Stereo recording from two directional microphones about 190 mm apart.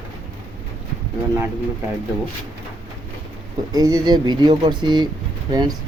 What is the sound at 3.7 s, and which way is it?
Speech, 20° right (ahead or behind).